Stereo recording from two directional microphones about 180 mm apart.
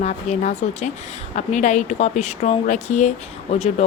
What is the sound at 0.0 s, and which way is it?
A woman's voice, 40° left (ahead or behind).